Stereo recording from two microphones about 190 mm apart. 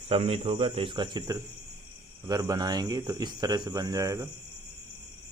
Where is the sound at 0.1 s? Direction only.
30° right (ahead or behind).